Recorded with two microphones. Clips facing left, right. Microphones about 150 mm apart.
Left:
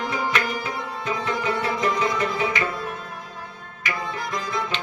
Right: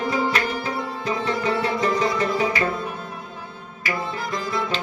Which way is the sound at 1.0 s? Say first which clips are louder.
Right 1 dB; 35° right (ahead or behind).